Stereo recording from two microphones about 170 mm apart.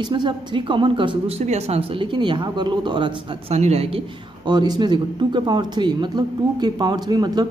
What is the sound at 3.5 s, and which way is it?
Speech, 40° right (ahead or behind).